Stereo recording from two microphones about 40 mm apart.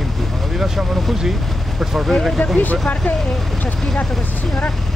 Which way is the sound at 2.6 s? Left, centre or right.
Left.